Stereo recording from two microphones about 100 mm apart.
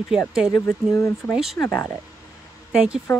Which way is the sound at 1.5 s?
20° left (ahead or behind).